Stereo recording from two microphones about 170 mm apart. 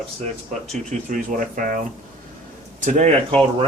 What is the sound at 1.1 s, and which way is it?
Speech, 55° right (ahead or behind).